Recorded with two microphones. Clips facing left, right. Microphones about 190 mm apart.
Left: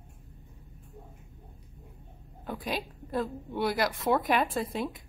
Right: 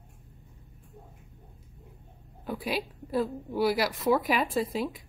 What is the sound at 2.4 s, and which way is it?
A woman's voice, 5° right (ahead or behind).